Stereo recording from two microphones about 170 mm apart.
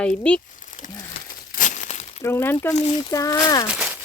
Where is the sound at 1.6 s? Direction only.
50° left (ahead or behind).